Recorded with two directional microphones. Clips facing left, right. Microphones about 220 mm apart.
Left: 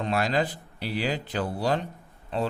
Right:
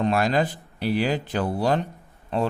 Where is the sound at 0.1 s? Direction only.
50° right (ahead or behind).